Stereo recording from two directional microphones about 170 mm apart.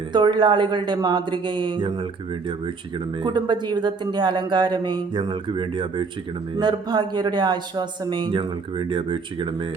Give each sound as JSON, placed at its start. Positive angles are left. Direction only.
{"t": 0.1, "sound": "speech", "side_deg": -25}
{"t": 3.2, "sound": "speech", "side_deg": -25}